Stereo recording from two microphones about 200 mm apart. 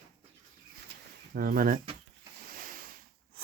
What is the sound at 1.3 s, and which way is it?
Speech, 50° right (ahead or behind).